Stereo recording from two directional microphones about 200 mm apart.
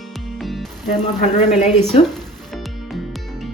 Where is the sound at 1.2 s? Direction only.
35° left (ahead or behind).